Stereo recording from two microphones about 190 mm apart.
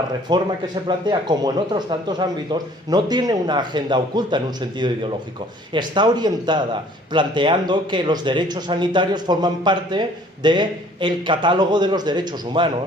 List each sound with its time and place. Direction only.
0.3 s speech: 20° right (ahead or behind)